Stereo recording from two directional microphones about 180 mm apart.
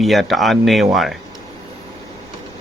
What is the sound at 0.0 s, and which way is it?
Speech, centre (ahead or behind).